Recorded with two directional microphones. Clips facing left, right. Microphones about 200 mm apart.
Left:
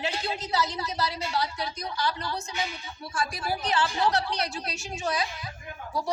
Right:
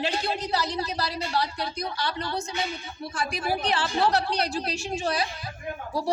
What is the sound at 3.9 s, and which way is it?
Speech, 35° right (ahead or behind).